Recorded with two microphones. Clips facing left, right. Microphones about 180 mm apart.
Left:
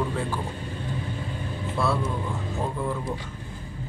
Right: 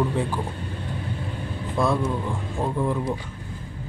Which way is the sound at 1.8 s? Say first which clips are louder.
Right 3 dB; 15° right (ahead or behind).